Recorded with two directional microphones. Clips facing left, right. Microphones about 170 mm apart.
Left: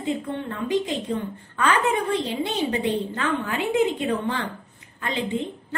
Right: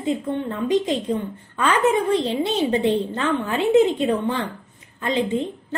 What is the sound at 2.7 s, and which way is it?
A woman's voice, 25° right (ahead or behind).